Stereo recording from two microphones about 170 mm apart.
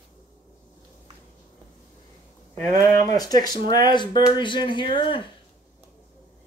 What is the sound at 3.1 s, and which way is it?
Speech, 20° left (ahead or behind).